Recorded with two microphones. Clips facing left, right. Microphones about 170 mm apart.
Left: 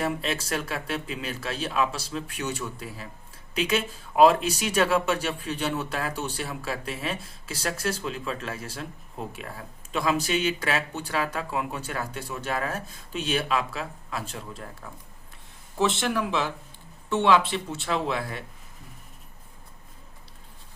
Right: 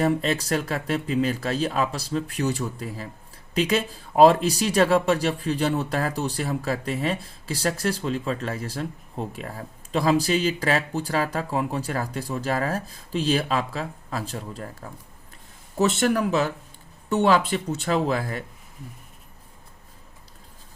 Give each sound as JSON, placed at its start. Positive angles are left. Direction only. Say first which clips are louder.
{"t": 0.0, "sound": "speech", "louder": "right 6 dB", "side_deg": -40}